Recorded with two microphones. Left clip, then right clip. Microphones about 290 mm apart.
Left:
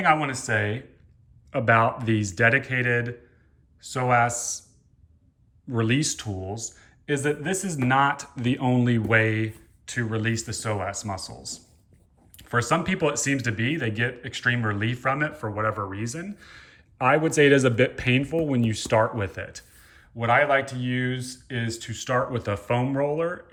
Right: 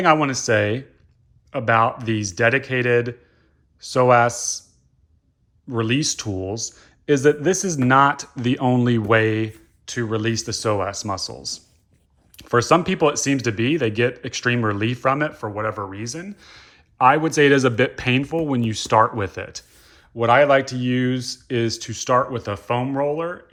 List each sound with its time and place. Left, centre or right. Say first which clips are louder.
0.0 s speech: right 5 dB; centre
1.5 s speech: right 2 dB; centre
5.6 s speech: right 3 dB; centre